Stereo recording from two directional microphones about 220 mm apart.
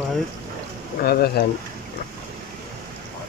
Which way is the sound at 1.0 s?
45° left (ahead or behind).